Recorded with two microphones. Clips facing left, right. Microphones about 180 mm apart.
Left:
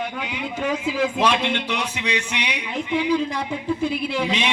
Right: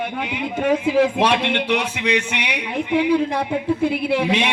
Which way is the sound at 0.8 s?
60° right (ahead or behind).